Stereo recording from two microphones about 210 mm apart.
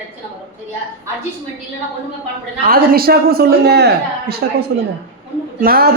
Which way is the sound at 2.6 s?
45° right (ahead or behind).